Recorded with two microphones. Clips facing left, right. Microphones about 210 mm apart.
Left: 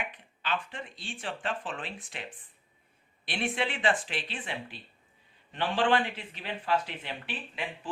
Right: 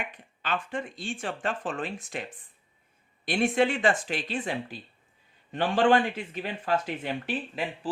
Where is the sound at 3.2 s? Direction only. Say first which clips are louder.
Right 8 dB; 45° right (ahead or behind).